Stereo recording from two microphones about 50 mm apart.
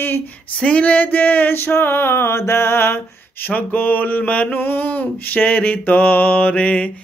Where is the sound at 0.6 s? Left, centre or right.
Left.